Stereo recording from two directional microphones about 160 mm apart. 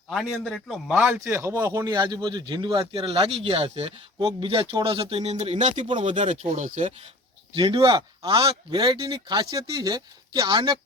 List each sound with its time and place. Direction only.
0.1 s a man's voice: centre (ahead or behind)
1.2 s speech: 15° right (ahead or behind); by 6.8 s 50° right (ahead or behind)
7.5 s speech: 30° right (ahead or behind)